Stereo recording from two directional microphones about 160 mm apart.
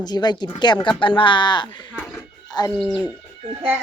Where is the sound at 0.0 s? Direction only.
25° left (ahead or behind).